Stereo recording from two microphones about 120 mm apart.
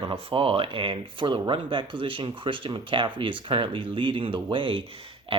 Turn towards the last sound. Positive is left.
turn(degrees=-45)  # may be behind; listen again after turning